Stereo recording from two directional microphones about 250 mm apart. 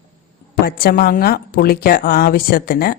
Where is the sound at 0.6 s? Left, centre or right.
Left.